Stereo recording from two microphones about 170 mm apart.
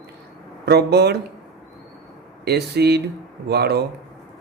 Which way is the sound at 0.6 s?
75° right (ahead or behind).